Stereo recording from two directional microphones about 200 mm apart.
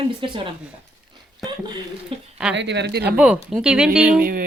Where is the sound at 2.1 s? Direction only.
25° right (ahead or behind).